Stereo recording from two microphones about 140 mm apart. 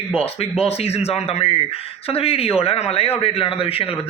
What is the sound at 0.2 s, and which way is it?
Speech, 45° left (ahead or behind).